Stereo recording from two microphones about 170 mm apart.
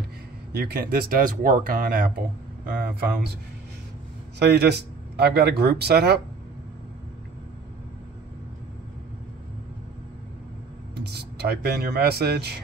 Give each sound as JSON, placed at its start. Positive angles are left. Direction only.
{"t": 0.5, "sound": "speech", "side_deg": -65}
{"t": 4.4, "sound": "speech", "side_deg": -75}
{"t": 11.0, "sound": "speech", "side_deg": -75}